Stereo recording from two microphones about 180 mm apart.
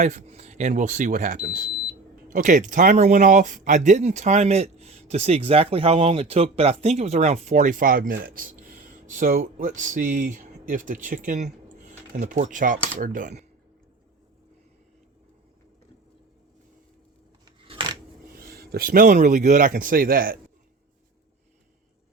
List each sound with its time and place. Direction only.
0.0 s speech: 40° right (ahead or behind)
17.4 s scissors: 30° right (ahead or behind)
18.3 s speech: 55° right (ahead or behind)